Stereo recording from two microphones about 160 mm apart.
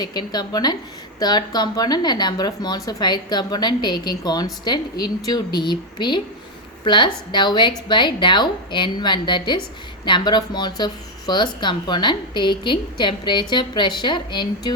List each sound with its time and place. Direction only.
0.0 s speech: 25° left (ahead or behind)